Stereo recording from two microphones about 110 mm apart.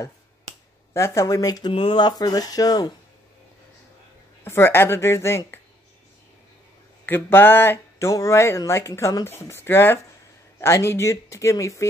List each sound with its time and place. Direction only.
0.9 s speech: 25° left (ahead or behind)
1.7 s speech: 50° left (ahead or behind); by 2.9 s 35° left (ahead or behind)
4.5 s speech: 20° left (ahead or behind)
7.1 s speech: 20° left (ahead or behind)